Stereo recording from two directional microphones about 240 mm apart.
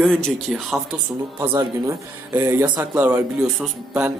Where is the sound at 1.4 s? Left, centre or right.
Centre.